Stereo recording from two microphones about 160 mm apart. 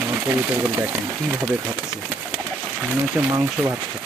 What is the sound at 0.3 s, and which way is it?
Speech, 15° right (ahead or behind).